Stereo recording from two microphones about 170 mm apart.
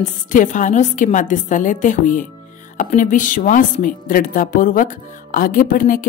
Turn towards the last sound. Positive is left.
turn(degrees=55)  # may be behind; listen again after turning